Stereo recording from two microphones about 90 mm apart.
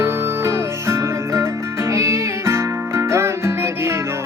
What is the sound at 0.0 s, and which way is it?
Music, 30° right (ahead or behind).